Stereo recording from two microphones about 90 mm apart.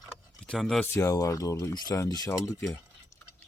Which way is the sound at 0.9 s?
35° left (ahead or behind).